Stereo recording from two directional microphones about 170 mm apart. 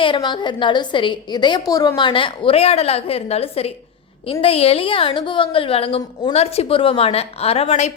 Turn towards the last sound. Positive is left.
turn(degrees=40)  # may be behind; listen again after turning